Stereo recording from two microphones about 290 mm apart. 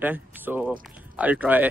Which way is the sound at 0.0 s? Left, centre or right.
Centre.